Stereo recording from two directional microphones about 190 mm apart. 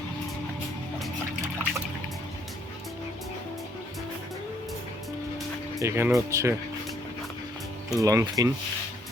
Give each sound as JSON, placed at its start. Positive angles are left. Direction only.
{"t": 5.8, "sound": "speech", "side_deg": -15}
{"t": 7.9, "sound": "speech", "side_deg": -20}